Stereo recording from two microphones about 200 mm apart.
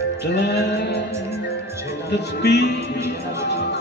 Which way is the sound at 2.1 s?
55° left (ahead or behind).